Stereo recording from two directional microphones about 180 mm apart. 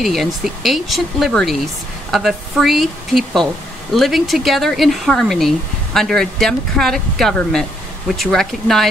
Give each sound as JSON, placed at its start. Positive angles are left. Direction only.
{"t": 0.0, "sound": "speech", "side_deg": 0}